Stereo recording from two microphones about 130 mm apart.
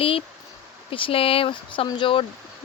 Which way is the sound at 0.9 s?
45° left (ahead or behind).